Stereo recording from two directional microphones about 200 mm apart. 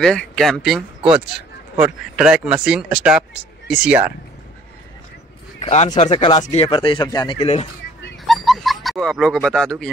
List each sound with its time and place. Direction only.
0.0 s speech: centre (ahead or behind)
5.6 s speech: 35° left (ahead or behind)
8.3 s a sound: centre (ahead or behind)